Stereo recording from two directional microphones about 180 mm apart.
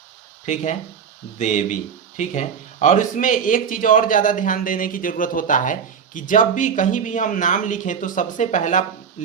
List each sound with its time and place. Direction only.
0.4 s speech: 40° left (ahead or behind)